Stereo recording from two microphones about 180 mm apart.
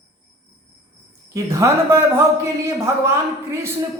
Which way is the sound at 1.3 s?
15° right (ahead or behind).